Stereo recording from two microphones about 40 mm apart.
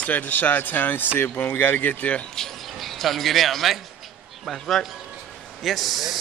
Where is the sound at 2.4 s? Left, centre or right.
Centre.